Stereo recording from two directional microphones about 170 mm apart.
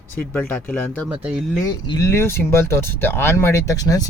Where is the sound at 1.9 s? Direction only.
15° left (ahead or behind).